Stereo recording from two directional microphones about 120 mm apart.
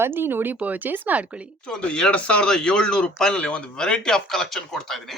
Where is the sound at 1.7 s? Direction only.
10° left (ahead or behind).